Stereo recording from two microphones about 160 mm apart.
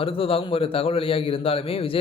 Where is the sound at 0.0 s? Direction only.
35° left (ahead or behind).